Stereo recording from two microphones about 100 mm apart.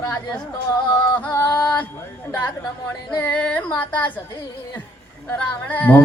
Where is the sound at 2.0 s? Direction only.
20° left (ahead or behind).